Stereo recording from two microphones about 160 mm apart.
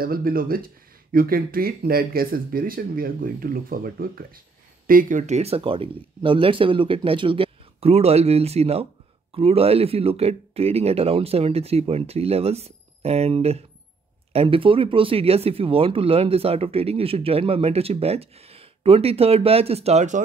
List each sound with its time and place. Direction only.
0.0 s speech: 65° right (ahead or behind); by 20.2 s 45° right (ahead or behind)